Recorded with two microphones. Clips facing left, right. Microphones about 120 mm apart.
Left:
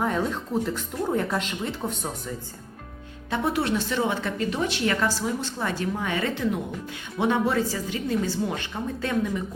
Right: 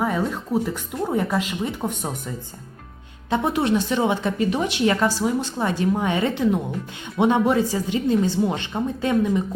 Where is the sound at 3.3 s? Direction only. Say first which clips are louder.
Right 4 dB; 20° right (ahead or behind).